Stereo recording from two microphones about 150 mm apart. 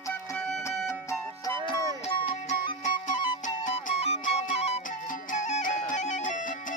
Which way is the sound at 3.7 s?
50° left (ahead or behind).